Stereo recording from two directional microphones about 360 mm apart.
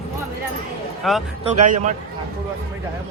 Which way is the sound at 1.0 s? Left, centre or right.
Centre.